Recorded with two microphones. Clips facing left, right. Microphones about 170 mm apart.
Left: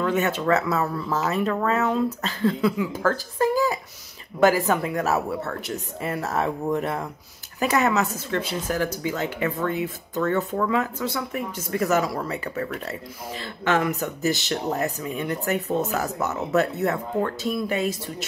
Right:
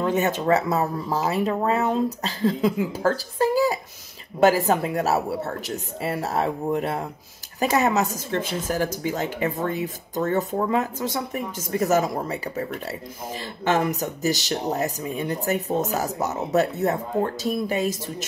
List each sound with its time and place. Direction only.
0.0 s speech: 35° right (ahead or behind)
1.2 s speech: 15° right (ahead or behind)
1.9 s speech: 35° right (ahead or behind)
12.5 s speech: 20° right (ahead or behind)
13.7 s speech: 40° right (ahead or behind)